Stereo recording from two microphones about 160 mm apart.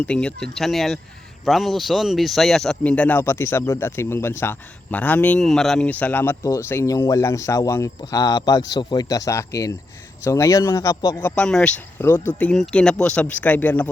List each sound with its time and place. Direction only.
0.0 s speech: 5° left (ahead or behind)